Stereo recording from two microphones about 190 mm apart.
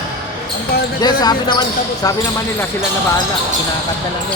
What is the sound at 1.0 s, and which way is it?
Speech, 20° left (ahead or behind).